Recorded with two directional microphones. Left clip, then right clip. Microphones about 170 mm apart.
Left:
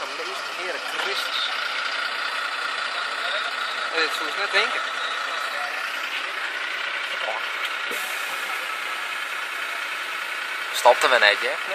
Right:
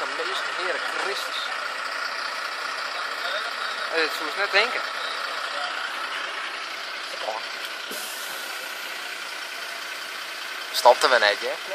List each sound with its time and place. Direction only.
4.6 s speech: 30° right (ahead or behind)
10.8 s speech: 15° right (ahead or behind)